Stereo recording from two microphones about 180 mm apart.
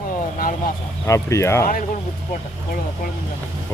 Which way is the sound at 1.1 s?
15° left (ahead or behind).